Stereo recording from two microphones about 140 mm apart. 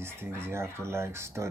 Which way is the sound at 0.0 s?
15° right (ahead or behind).